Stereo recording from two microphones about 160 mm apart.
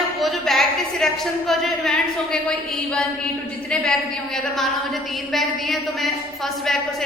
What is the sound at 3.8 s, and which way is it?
A woman's voice, 5° left (ahead or behind).